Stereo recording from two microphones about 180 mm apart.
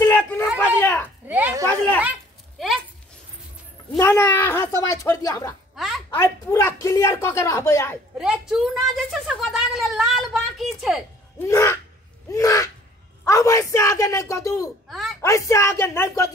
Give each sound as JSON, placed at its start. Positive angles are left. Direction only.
{"t": 0.0, "sound": "a sound", "side_deg": 10}
{"t": 1.2, "sound": "a sound", "side_deg": -10}
{"t": 4.0, "sound": "speech", "side_deg": 10}
{"t": 8.2, "sound": "a woman's voice", "side_deg": -5}
{"t": 11.3, "sound": "speech", "side_deg": 15}
{"t": 12.3, "sound": "gasp", "side_deg": 20}
{"t": 13.2, "sound": "speech", "side_deg": 15}
{"t": 14.9, "sound": "a sound", "side_deg": 0}
{"t": 15.2, "sound": "speech", "side_deg": 15}